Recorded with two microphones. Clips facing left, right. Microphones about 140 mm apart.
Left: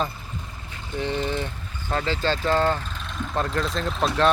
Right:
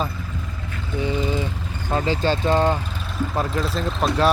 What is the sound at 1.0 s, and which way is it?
Vehicle, 10° right (ahead or behind).